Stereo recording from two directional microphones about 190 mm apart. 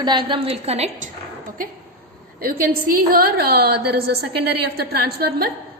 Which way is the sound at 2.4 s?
50° right (ahead or behind).